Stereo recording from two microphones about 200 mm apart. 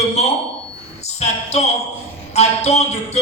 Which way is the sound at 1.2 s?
30° left (ahead or behind).